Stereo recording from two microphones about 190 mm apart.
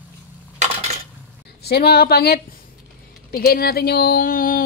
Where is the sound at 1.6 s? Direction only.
55° left (ahead or behind).